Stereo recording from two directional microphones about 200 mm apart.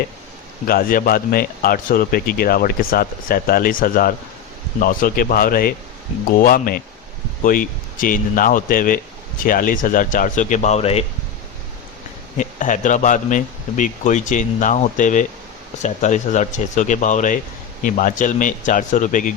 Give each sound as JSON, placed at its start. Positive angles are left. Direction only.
{"t": 0.7, "sound": "speech", "side_deg": 45}
{"t": 12.4, "sound": "speech", "side_deg": 40}